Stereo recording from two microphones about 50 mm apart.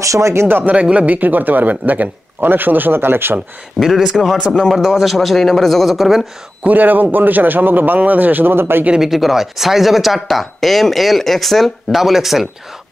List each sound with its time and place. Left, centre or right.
0.0 s speech: right
0.7 s speech: right
3.8 s speech: centre
4.5 s speech: centre
4.7 s speech: centre
6.6 s speech: right
8.9 s speech: centre